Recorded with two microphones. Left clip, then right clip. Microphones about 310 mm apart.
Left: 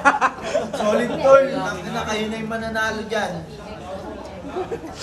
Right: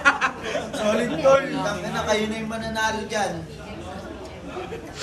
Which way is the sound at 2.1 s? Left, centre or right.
Centre.